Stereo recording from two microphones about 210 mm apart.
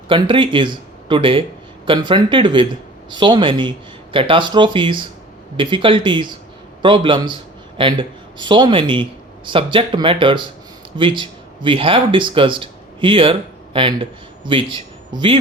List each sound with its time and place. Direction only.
0.1 s speech: 25° right (ahead or behind)